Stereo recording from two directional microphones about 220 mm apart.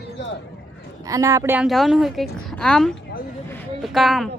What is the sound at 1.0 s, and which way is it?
A woman's voice, 15° right (ahead or behind).